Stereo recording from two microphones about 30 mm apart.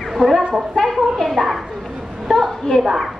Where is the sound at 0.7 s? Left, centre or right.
Centre.